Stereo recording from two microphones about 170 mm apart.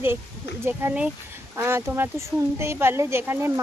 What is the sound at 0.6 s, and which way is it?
Speech, 15° right (ahead or behind).